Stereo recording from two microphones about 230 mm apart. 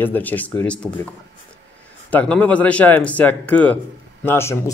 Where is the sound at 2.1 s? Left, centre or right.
Centre.